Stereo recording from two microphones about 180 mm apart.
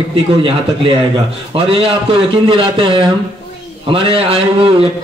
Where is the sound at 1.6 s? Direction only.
30° right (ahead or behind).